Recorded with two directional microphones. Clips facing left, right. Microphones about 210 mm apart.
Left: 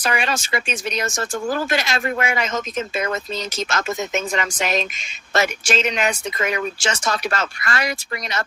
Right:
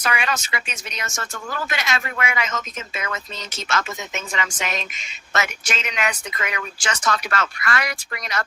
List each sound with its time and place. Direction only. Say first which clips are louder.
0.0 s speech: left 2 dB; 30° left (ahead or behind)